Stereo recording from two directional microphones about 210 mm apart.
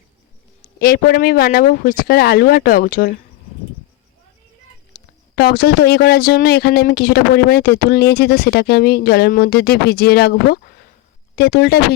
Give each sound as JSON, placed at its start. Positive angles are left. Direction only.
{"t": 0.8, "sound": "speech", "side_deg": 45}
{"t": 5.4, "sound": "speech", "side_deg": 45}